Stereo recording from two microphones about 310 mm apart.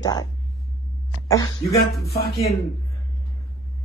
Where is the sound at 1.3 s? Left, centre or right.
Centre.